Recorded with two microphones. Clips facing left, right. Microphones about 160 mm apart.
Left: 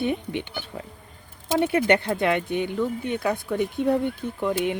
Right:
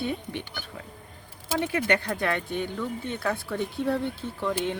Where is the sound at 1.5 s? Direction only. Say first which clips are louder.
Left 5 dB; 25° left (ahead or behind).